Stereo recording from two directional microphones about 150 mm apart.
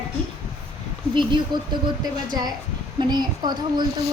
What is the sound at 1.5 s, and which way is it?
Speech, 30° right (ahead or behind).